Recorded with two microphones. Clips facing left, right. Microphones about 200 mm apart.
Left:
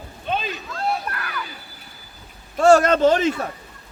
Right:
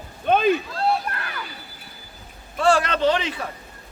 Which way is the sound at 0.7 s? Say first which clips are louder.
Right 2 dB; 30° right (ahead or behind).